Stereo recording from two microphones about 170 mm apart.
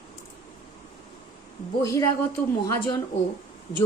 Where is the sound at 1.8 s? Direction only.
20° left (ahead or behind).